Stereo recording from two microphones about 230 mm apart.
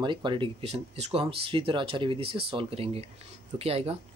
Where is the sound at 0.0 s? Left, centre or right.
Centre.